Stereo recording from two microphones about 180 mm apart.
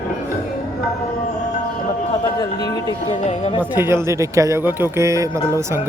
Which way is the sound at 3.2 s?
30° left (ahead or behind).